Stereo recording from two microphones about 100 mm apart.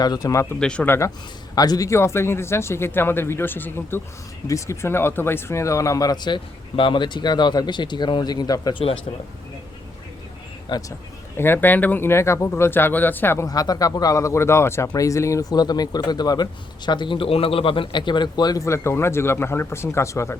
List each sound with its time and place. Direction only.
0.0 s speech: 40° left (ahead or behind)
0.6 s speech: 10° left (ahead or behind)
0.9 s speech: 30° left (ahead or behind)
1.5 s speech: 40° left (ahead or behind)
8.7 s speech: 70° left (ahead or behind)
10.7 s speech: 35° left (ahead or behind)
11.3 s speech: 20° left (ahead or behind)
13.5 s speech: 40° left (ahead or behind)